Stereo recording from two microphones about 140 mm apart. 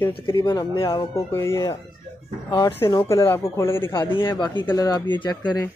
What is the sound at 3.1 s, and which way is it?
Speech, 15° left (ahead or behind).